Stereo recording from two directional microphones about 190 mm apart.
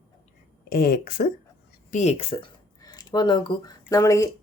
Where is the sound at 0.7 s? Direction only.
50° left (ahead or behind).